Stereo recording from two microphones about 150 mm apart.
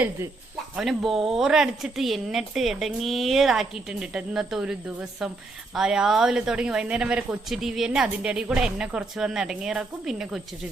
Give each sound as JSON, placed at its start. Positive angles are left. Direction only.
{"t": 0.8, "sound": "speech", "side_deg": 0}